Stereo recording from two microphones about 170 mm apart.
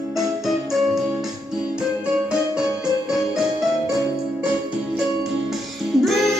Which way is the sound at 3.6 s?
5° right (ahead or behind).